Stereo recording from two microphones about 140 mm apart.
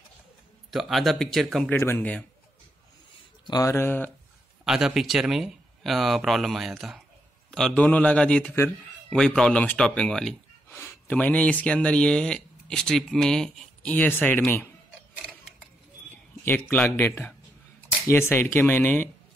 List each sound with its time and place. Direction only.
0.7 s speech: centre (ahead or behind)
1.7 s speech: 15° left (ahead or behind)
3.4 s speech: 25° left (ahead or behind)
4.6 s speech: 5° right (ahead or behind); by 14.7 s 15° left (ahead or behind)
16.4 s speech: 10° left (ahead or behind)